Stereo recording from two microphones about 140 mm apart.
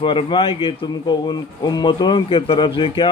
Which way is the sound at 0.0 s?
40° left (ahead or behind).